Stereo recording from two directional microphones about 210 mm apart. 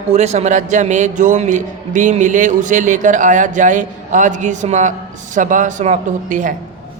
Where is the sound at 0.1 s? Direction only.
30° right (ahead or behind).